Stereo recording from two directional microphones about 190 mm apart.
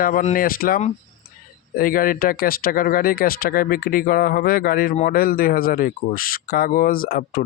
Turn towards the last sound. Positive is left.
turn(degrees=50)  # may be behind; listen again after turning